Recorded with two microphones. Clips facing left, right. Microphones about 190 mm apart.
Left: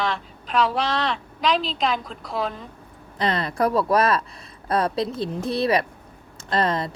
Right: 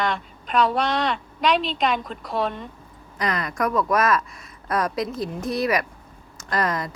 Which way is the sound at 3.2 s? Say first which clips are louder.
Left 3 dB; 30° left (ahead or behind).